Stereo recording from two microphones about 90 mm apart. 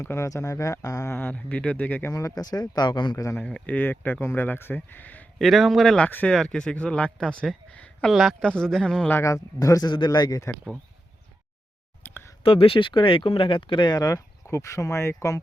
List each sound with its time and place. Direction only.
0.0 s speech: 35° left (ahead or behind)
1.1 s speech: 20° left (ahead or behind)
2.0 s speech: 40° left (ahead or behind); by 3.2 s 55° left (ahead or behind)
3.3 s speech: 15° left (ahead or behind)
5.4 s speech: centre (ahead or behind)
6.1 s speech: 20° left (ahead or behind)
6.3 s speech: 5° left (ahead or behind)
8.0 s speech: centre (ahead or behind)
9.2 s speech: 35° left (ahead or behind)
9.9 s speech: 55° left (ahead or behind)
12.0 s a sound: 25° left (ahead or behind)
12.4 s speech: 90° left; by 15.4 s 35° left (ahead or behind)